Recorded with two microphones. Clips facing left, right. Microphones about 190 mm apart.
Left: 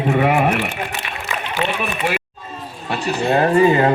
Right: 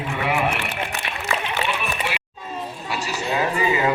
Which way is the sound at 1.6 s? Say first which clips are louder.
Left 4 dB; 45° left (ahead or behind).